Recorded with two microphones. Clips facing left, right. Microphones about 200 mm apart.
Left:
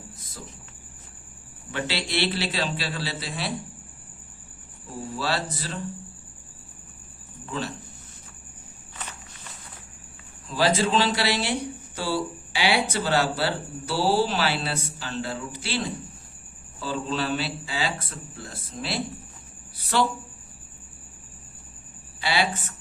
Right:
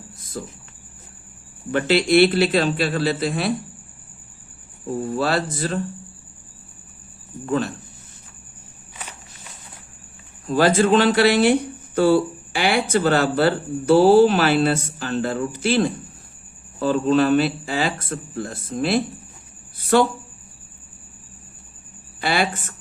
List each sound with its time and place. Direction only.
0.4 s speech: 55° right (ahead or behind)
1.7 s speech: 50° right (ahead or behind)
5.0 s speech: 55° right (ahead or behind)
7.4 s speech: 50° right (ahead or behind)
10.4 s speech: 50° right (ahead or behind)
19.7 s a sound: 50° right (ahead or behind)
22.2 s speech: 50° right (ahead or behind)